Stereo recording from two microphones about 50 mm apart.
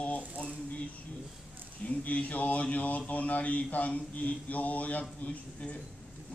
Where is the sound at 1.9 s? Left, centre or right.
Left.